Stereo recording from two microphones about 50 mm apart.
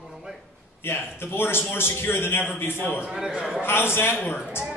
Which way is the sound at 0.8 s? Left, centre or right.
Left.